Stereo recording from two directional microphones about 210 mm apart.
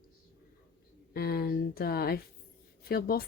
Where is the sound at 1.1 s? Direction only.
45° left (ahead or behind).